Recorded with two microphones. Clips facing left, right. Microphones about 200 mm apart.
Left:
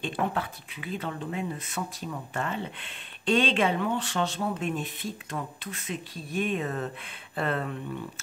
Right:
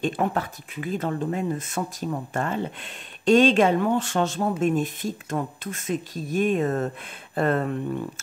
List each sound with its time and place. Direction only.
0.3 s speech: 45° right (ahead or behind)